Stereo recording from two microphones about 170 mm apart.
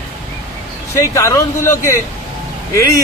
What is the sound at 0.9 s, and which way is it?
Speech, 15° left (ahead or behind).